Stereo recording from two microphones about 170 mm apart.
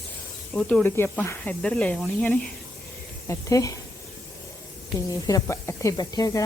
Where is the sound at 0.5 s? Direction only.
5° left (ahead or behind).